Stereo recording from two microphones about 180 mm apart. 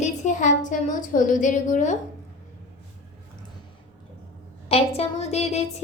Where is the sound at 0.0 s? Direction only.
45° left (ahead or behind).